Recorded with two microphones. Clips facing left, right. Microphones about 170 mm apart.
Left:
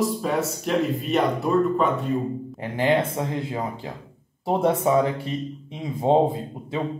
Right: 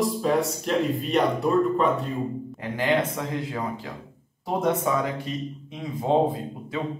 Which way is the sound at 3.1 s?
25° left (ahead or behind).